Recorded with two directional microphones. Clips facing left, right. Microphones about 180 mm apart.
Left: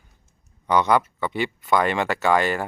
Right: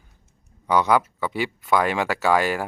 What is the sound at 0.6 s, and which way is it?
Speech, 5° right (ahead or behind).